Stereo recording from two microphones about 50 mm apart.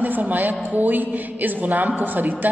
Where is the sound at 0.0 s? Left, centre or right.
Right.